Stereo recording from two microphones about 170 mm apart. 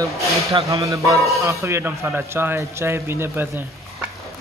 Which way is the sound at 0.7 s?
20° right (ahead or behind).